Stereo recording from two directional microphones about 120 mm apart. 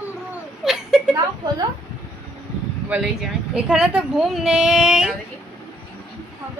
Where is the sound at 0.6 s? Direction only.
5° right (ahead or behind).